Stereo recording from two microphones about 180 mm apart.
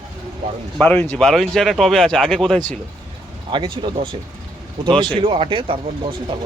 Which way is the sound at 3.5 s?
25° right (ahead or behind).